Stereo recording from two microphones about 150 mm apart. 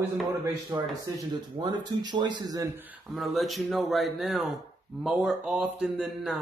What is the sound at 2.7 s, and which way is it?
Speech, 10° right (ahead or behind).